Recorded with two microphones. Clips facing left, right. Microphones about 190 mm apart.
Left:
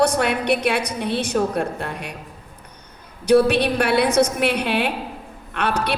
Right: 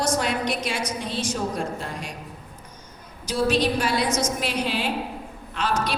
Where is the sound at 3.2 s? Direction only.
60° left (ahead or behind).